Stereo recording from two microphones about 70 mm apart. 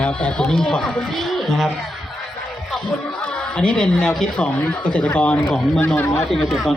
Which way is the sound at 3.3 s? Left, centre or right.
Centre.